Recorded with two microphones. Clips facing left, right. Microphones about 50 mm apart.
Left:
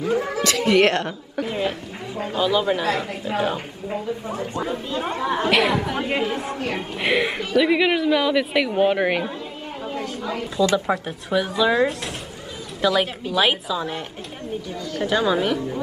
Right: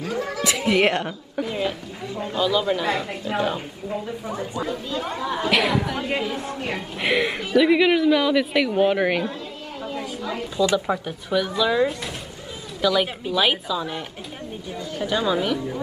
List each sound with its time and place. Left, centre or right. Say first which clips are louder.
0.0 s speech: left 4 dB; left
0.4 s a woman's voice: left 2 dB; centre
1.4 s a sound: left 1 dB; centre
2.2 s a woman's voice: left 1 dB; centre
5.5 s a woman's voice: even; centre
6.2 s speech: left 3 dB; left
6.7 s a woman's voice: left 1 dB; centre
10.6 s a woman's voice: left 1 dB; centre
14.7 s speech: left 1 dB; right
15.1 s a woman's voice: left 2 dB; centre